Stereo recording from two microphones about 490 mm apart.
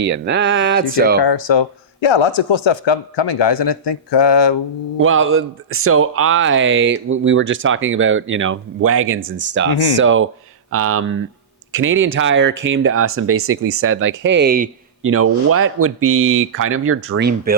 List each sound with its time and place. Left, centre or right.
0.0 s speech: right
1.2 s speech: left
4.9 s speech: right